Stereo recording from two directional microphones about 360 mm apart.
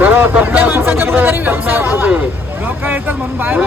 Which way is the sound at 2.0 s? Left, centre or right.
Centre.